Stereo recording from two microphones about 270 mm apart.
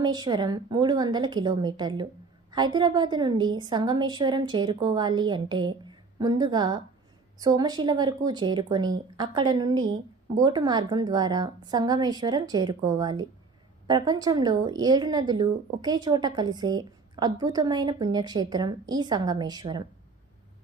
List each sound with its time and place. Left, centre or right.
0.0 s speech: centre